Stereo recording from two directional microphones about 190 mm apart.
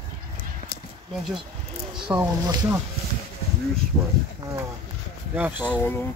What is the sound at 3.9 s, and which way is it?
Speech, 10° right (ahead or behind).